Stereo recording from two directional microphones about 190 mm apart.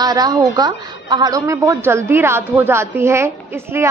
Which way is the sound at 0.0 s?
20° right (ahead or behind).